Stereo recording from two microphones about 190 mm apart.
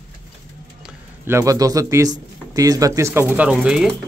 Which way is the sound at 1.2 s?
15° right (ahead or behind).